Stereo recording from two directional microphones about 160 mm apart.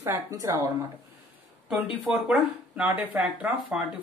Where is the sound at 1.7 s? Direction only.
5° right (ahead or behind).